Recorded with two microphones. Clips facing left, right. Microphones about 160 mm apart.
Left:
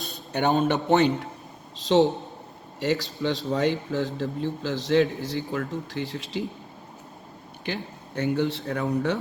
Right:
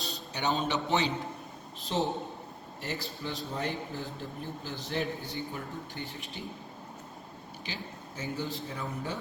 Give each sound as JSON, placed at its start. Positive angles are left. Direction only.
{"t": 0.0, "sound": "a man's voice", "side_deg": 55}
{"t": 1.8, "sound": "speech", "side_deg": 90}
{"t": 7.6, "sound": "speech", "side_deg": 60}